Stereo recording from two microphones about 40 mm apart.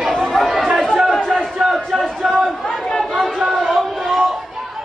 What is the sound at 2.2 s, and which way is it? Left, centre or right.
Chatter, centre.